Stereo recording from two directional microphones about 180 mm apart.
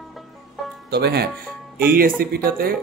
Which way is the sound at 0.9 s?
65° right (ahead or behind).